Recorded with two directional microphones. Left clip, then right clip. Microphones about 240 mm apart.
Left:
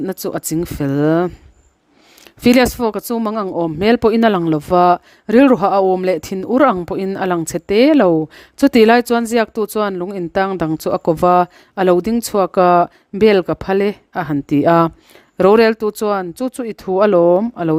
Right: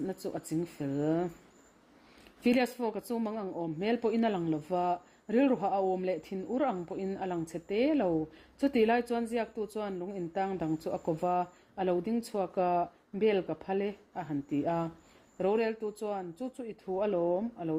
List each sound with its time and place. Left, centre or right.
0.0 s speech: left
2.4 s speech: left